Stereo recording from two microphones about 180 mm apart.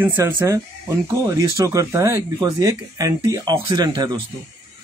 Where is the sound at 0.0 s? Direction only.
10° right (ahead or behind).